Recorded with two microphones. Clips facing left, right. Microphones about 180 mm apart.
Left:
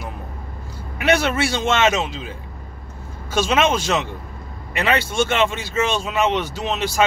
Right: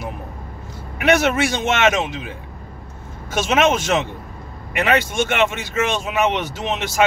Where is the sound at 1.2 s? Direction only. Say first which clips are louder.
Right 2 dB; 20° right (ahead or behind).